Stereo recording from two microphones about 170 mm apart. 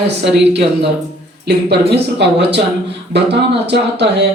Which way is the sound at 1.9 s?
80° right.